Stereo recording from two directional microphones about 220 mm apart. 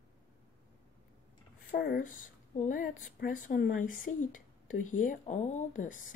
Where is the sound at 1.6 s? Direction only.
45° left (ahead or behind).